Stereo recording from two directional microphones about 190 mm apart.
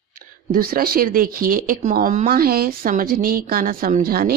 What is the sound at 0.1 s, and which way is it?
A woman's voice, 50° right (ahead or behind).